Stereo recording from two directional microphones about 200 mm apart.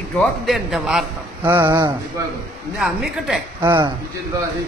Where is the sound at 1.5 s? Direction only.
15° right (ahead or behind).